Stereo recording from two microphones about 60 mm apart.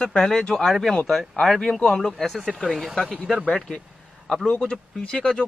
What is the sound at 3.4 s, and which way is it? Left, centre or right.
Speech, centre.